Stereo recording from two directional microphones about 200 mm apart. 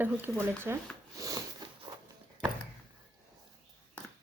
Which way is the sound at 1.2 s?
20° right (ahead or behind).